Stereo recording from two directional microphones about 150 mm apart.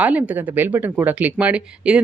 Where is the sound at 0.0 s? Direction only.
10° right (ahead or behind).